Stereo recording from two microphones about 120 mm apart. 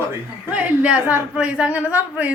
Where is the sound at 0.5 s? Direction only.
10° right (ahead or behind).